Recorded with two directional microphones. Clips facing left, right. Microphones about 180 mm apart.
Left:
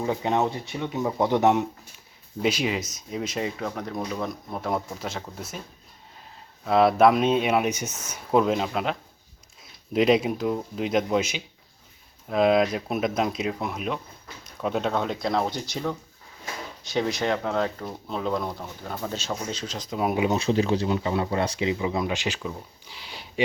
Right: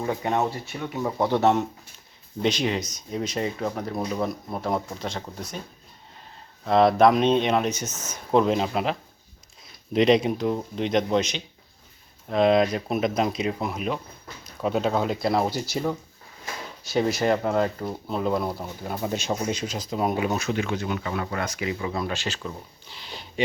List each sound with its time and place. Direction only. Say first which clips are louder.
0.0 s speech: left 1 dB; 10° left (ahead or behind)
6.7 s speech: right 1 dB; 5° left (ahead or behind)
20.1 s speech: left 3 dB; 20° left (ahead or behind)